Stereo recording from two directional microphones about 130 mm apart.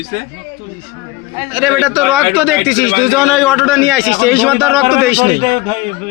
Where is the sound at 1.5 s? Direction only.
Centre (ahead or behind).